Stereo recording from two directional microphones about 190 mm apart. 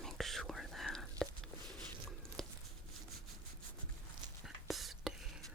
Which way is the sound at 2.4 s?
Centre (ahead or behind).